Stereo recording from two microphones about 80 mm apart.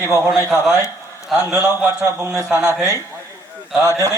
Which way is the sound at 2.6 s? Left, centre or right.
Right.